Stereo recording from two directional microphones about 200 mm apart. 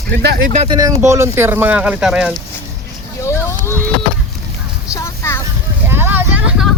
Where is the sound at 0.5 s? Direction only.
30° right (ahead or behind).